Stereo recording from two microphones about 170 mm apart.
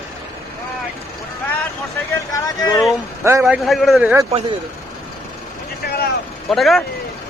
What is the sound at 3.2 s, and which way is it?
Speech, 15° right (ahead or behind).